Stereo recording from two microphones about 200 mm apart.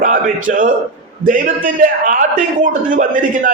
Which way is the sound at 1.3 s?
45° right (ahead or behind).